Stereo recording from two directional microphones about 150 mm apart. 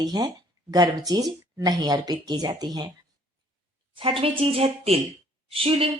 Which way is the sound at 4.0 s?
35° right (ahead or behind).